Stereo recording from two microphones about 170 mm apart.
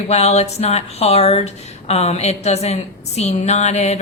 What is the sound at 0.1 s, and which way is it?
A woman's voice, 40° left (ahead or behind).